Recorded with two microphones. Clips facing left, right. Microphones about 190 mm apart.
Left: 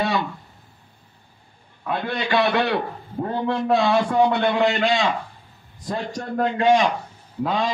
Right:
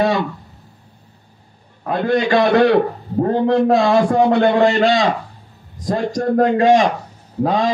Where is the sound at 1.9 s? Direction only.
40° right (ahead or behind).